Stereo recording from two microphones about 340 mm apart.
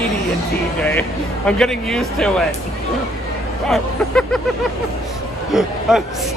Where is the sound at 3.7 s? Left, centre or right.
Centre.